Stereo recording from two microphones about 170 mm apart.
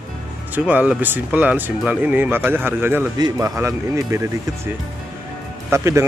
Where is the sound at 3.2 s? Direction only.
25° right (ahead or behind).